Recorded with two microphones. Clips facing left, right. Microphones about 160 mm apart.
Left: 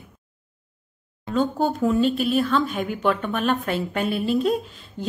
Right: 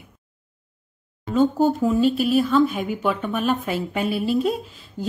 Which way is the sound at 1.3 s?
10° right (ahead or behind).